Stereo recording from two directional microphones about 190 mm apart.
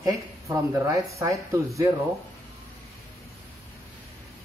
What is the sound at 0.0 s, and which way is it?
Speech, 15° right (ahead or behind).